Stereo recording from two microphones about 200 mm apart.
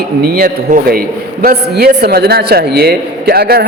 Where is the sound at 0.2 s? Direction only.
50° right (ahead or behind).